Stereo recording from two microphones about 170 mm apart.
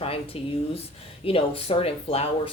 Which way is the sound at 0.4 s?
35° left (ahead or behind).